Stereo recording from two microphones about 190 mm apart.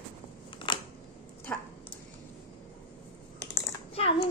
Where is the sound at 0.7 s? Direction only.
25° left (ahead or behind).